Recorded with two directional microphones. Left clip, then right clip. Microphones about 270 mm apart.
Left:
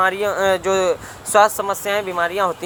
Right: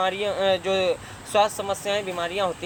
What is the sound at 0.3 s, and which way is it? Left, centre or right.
Speech, centre.